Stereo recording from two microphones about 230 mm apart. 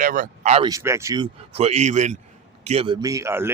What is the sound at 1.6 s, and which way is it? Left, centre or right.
A man's voice, right.